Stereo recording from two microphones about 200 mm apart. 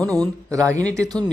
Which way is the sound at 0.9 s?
15° right (ahead or behind).